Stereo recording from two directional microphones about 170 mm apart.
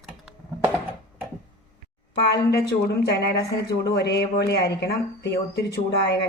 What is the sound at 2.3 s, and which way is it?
A woman's voice, 75° left (ahead or behind).